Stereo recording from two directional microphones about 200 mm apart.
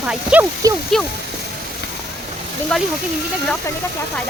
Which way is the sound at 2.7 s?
5° left (ahead or behind).